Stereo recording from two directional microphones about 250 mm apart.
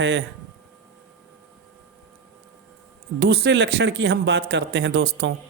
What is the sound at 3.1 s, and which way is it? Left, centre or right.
Speech, right.